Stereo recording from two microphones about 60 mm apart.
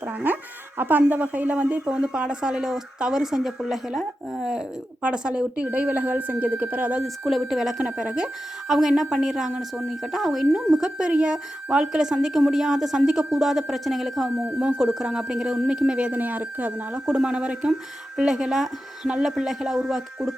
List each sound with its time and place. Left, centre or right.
0.0 s a sound: right
0.8 s speech: right; by 4.6 s centre
5.0 s speech: centre
7.0 s speech: centre
7.9 s speech: centre
16.1 s speech: right; by 20.3 s centre